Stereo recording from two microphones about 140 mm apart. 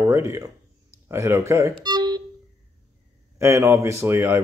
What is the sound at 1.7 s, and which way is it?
Music, 30° right (ahead or behind).